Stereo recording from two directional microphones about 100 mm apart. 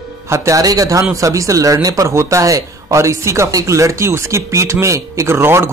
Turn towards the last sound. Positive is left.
turn(degrees=-20)  # may be behind; listen again after turning